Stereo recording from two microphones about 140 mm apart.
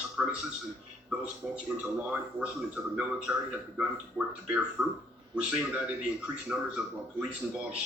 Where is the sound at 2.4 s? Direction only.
10° right (ahead or behind).